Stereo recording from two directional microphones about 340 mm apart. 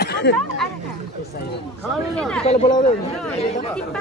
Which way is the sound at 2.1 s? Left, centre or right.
Centre.